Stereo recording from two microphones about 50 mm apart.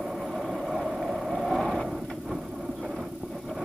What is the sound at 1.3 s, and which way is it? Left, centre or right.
Vehicle, centre.